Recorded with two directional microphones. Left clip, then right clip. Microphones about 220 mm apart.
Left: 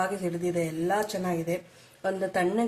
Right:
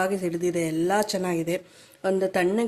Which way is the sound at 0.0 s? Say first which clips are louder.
Right 4 dB; 40° right (ahead or behind).